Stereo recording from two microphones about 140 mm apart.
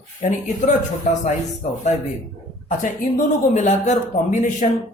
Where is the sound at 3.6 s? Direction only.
55° left (ahead or behind).